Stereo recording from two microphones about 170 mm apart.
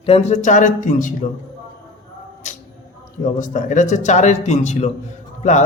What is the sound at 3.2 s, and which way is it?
Speech, 50° left (ahead or behind).